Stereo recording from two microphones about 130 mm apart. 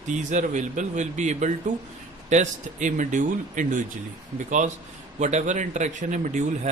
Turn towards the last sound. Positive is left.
turn(degrees=-70)  # may be behind; listen again after turning